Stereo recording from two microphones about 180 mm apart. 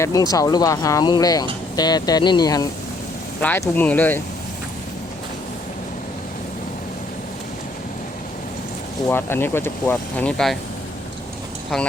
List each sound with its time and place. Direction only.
0.0 s speech: 20° left (ahead or behind)
3.4 s speech: 10° left (ahead or behind)
9.0 s speech: 10° left (ahead or behind)